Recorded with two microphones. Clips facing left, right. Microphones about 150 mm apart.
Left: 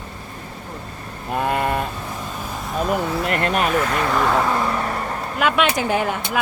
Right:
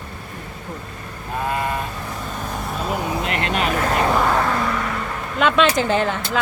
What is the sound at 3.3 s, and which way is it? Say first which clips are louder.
Speech: left 4 dB; 45° left (ahead or behind).